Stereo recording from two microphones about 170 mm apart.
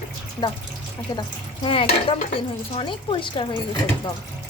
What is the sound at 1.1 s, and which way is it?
Speech, 25° left (ahead or behind).